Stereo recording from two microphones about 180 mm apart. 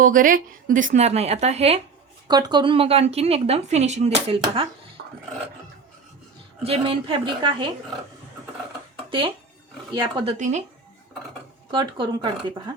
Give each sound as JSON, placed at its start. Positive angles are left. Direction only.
{"t": 0.0, "sound": "speech", "side_deg": -50}
{"t": 2.2, "sound": "speech", "side_deg": -25}
{"t": 5.0, "sound": "dog", "side_deg": -65}
{"t": 6.6, "sound": "a woman's voice", "side_deg": -35}
{"t": 9.0, "sound": "a woman's voice", "side_deg": -30}
{"t": 10.3, "sound": "speech", "side_deg": -40}
{"t": 11.7, "sound": "a woman's voice", "side_deg": -25}